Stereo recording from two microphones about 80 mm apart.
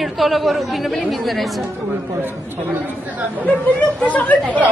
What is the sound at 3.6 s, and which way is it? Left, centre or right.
Speech, centre.